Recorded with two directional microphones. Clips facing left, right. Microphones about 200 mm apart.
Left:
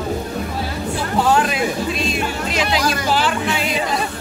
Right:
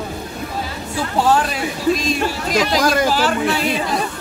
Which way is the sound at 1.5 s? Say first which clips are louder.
Right 2 dB; 40° right (ahead or behind).